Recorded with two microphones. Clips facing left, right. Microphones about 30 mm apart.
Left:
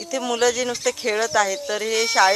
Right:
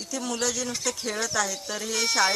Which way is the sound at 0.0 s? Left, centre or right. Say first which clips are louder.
Left 7 dB; left.